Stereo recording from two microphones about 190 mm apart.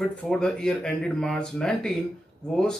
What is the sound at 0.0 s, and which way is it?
Speech, 5° left (ahead or behind).